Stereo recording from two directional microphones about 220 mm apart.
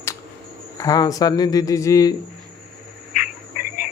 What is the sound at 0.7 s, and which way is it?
Speech, 15° left (ahead or behind).